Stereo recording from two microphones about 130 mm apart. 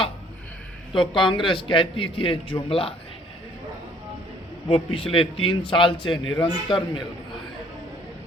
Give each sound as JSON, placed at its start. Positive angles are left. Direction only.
{"t": 0.9, "sound": "a man's voice", "side_deg": 40}
{"t": 4.7, "sound": "a man's voice", "side_deg": 45}